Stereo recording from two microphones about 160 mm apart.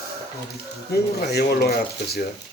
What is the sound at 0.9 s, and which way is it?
Speech, 85° left.